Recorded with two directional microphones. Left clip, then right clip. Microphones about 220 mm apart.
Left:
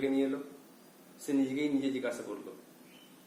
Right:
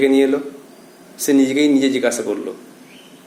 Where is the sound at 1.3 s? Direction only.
45° right (ahead or behind).